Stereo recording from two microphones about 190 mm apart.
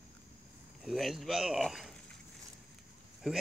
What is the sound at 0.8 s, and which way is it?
Speech, centre (ahead or behind).